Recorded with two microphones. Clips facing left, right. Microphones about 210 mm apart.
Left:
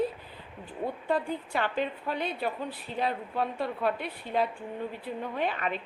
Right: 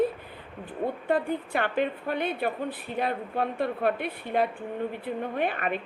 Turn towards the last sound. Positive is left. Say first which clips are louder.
# right 3 dB
turn(degrees=-55)  # may be behind; listen again after turning